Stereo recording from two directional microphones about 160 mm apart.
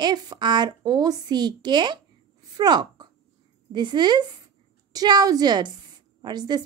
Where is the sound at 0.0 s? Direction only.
25° right (ahead or behind).